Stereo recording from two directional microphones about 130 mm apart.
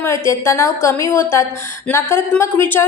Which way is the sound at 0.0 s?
20° left (ahead or behind).